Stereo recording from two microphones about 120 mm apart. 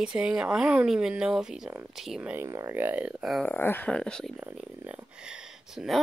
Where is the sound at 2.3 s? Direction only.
25° right (ahead or behind).